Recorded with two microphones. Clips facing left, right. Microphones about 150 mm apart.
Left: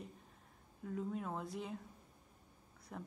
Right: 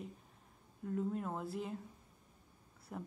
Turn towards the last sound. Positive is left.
turn(degrees=-5)  # may be behind; listen again after turning